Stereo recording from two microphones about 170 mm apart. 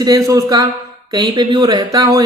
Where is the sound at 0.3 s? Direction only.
20° right (ahead or behind).